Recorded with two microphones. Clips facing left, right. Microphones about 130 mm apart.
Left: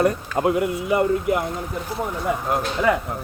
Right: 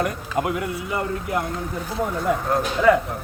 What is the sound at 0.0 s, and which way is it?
Speech, 30° left (ahead or behind).